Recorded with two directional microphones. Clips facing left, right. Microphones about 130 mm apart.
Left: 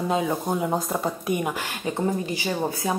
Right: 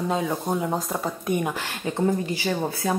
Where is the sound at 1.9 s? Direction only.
15° left (ahead or behind).